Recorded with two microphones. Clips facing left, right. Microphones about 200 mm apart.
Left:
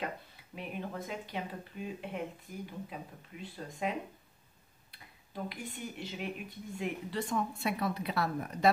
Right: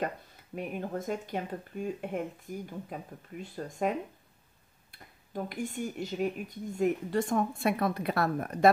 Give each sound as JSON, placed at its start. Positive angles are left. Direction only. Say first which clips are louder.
{"t": 0.6, "sound": "speech", "louder": "right 5 dB", "side_deg": -45}
{"t": 4.9, "sound": "speech", "louder": "right 5 dB", "side_deg": -45}